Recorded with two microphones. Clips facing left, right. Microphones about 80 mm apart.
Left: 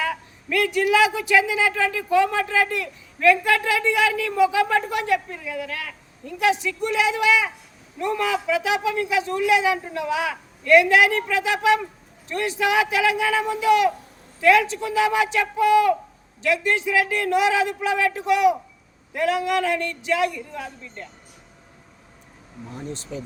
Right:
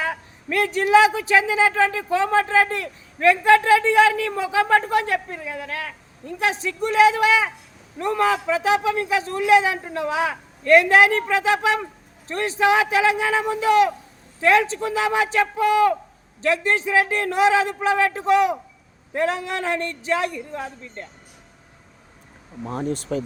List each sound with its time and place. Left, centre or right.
0.0 s a man's voice: right
22.6 s speech: right
23.0 s speech: right